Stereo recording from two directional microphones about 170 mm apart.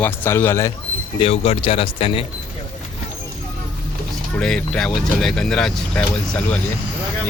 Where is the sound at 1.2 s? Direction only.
35° left (ahead or behind).